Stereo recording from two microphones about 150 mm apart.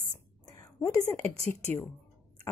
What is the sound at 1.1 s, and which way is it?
Speech, 15° left (ahead or behind).